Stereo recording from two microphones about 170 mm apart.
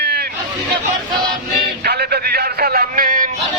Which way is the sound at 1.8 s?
70° right (ahead or behind).